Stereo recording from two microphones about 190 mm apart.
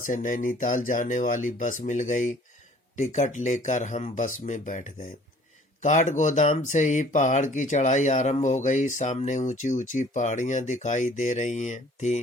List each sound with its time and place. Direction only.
0.0 s speech: 45° left (ahead or behind)